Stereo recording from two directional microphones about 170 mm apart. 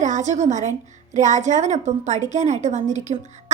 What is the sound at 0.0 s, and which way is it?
A woman's voice, 45° right (ahead or behind).